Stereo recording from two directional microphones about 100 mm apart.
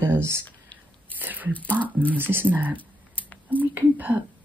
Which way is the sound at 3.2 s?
15° left (ahead or behind).